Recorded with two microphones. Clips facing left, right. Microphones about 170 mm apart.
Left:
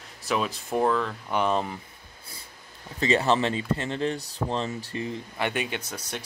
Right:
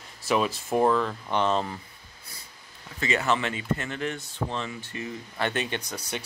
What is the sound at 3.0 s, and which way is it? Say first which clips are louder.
Speech: left 3 dB; 30° left (ahead or behind).